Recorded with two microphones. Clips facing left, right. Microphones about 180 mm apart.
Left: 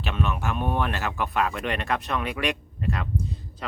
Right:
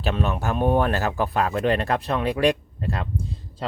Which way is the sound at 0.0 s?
35° right (ahead or behind).